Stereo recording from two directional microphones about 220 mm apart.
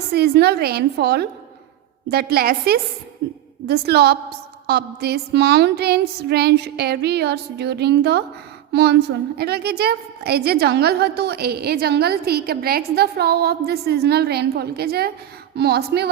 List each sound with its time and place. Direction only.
0.1 s a woman's voice: 45° right (ahead or behind)